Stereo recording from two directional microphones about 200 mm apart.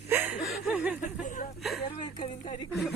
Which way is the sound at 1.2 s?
40° left (ahead or behind).